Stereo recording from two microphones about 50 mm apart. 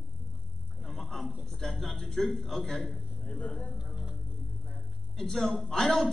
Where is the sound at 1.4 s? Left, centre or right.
Centre.